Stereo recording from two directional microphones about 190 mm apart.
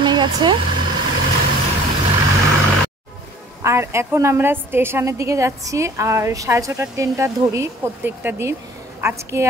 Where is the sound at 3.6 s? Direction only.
15° right (ahead or behind).